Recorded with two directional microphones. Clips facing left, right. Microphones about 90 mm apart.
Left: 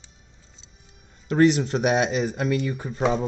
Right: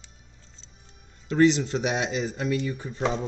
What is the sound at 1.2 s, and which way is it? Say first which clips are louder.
Speech: left 2 dB; 50° left (ahead or behind).